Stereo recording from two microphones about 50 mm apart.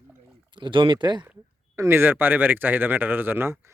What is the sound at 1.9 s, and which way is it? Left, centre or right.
Speech, right.